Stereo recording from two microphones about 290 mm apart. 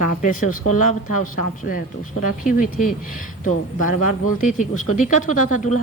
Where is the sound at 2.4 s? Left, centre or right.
Left.